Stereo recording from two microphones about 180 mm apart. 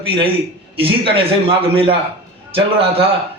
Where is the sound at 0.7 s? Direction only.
30° right (ahead or behind).